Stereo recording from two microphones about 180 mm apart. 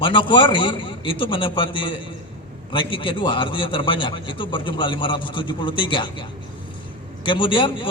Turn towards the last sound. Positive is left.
turn(degrees=30)  # may be behind; listen again after turning